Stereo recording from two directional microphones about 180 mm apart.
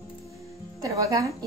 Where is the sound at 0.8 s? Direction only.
20° right (ahead or behind).